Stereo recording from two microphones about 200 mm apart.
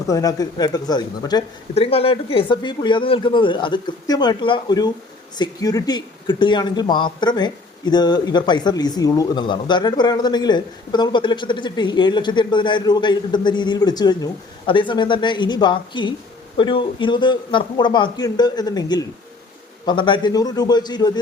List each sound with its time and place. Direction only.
0.1 s speech: 15° left (ahead or behind)